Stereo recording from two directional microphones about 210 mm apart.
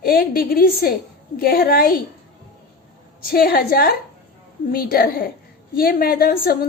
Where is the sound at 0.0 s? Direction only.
45° left (ahead or behind).